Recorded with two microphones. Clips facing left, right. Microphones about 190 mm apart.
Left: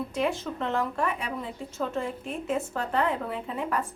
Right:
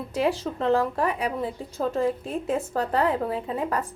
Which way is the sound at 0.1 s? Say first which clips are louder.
Right 3 dB; 35° right (ahead or behind).